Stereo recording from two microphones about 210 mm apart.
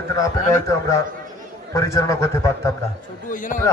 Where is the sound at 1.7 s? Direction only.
15° left (ahead or behind).